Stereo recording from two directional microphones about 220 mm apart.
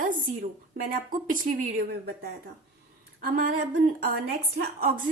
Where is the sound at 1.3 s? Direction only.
40° right (ahead or behind).